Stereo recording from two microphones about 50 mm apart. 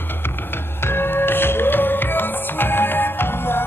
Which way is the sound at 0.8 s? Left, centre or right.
Left.